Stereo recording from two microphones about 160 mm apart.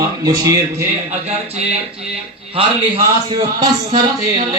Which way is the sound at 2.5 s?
35° right (ahead or behind).